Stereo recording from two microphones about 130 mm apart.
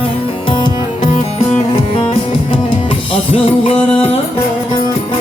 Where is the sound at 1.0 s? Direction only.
70° left (ahead or behind).